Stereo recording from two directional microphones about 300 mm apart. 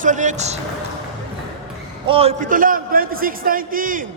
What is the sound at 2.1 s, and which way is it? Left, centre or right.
A man's voice, centre.